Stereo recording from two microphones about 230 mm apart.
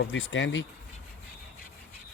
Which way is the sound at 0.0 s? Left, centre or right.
Left.